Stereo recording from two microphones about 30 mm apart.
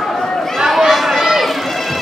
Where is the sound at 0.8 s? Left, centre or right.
Centre.